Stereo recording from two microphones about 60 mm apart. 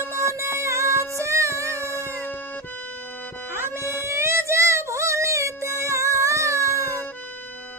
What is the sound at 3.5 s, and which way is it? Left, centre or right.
Child singing, right.